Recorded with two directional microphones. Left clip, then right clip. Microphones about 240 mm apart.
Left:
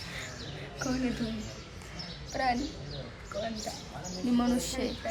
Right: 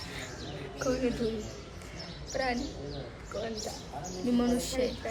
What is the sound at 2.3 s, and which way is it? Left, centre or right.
Speech, centre.